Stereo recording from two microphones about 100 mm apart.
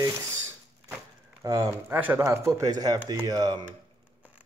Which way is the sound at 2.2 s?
30° right (ahead or behind).